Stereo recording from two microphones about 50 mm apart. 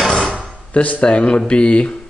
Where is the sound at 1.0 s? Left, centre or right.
Centre.